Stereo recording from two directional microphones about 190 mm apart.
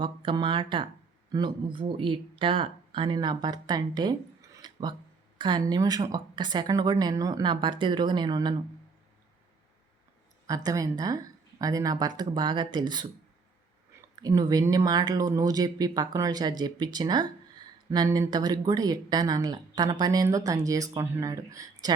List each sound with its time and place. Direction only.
0.0 s speech: 25° right (ahead or behind)
10.4 s speech: 20° right (ahead or behind)
14.2 s speech: 20° right (ahead or behind)